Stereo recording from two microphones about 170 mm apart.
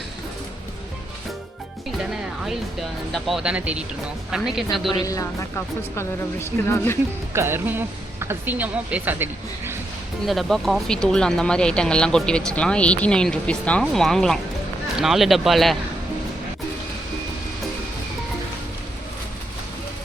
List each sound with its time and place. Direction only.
2.0 s speech: 5° right (ahead or behind)
5.0 s speech: 20° left (ahead or behind)
7.3 s speech: 15° right (ahead or behind)
10.2 s speech: centre (ahead or behind)